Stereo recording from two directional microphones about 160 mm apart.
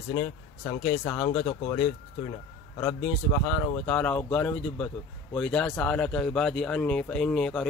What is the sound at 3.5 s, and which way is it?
A man's voice, 10° left (ahead or behind).